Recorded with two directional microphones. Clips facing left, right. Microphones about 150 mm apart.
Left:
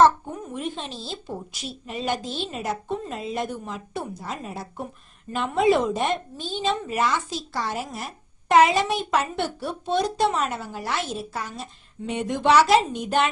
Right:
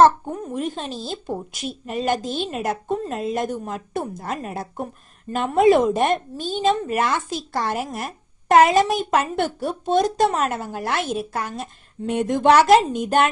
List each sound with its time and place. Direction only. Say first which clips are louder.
0.5 s a woman's voice: right 4 dB; 40° right (ahead or behind)